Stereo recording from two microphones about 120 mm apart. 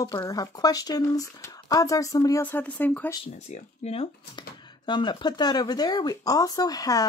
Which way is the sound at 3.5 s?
60° left (ahead or behind).